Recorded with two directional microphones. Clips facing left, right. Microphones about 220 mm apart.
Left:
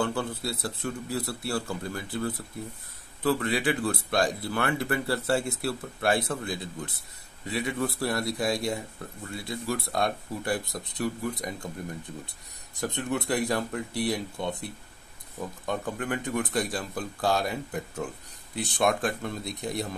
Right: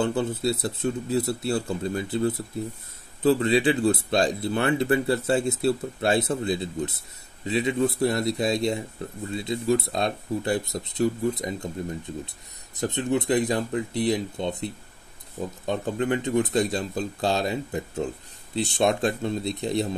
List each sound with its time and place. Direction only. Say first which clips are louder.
0.0 s speech: right 5 dB; 20° right (ahead or behind)
12.7 s speech: right 5 dB; 20° right (ahead or behind)